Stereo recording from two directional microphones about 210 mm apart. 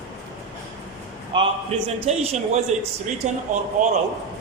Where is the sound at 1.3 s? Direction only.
30° right (ahead or behind).